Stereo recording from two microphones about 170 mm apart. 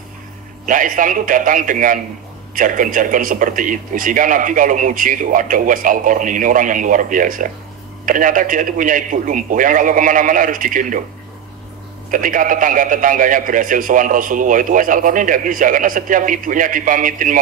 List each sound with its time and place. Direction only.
0.7 s a man's voice: 50° right (ahead or behind)
12.1 s a man's voice: 55° right (ahead or behind)